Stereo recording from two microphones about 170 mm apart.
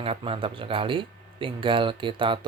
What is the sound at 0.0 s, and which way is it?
Speech, 35° right (ahead or behind).